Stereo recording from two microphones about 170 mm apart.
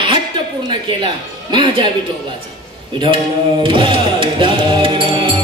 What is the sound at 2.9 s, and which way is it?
Music, 30° right (ahead or behind).